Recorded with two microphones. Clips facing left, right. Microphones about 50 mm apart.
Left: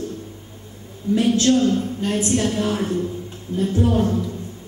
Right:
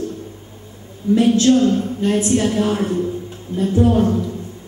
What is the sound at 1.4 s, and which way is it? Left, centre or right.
A woman's voice, centre.